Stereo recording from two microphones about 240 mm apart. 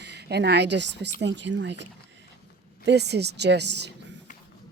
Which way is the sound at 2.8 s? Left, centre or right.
Right.